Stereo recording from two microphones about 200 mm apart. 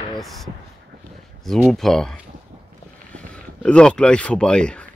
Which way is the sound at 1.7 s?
Centre (ahead or behind).